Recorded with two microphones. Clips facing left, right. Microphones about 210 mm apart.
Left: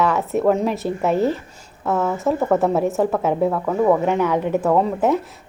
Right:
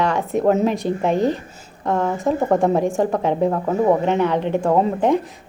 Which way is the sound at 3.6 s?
20° right (ahead or behind).